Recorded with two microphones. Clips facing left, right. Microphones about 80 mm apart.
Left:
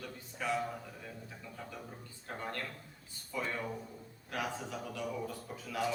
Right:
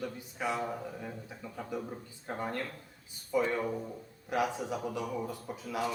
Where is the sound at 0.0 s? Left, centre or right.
Centre.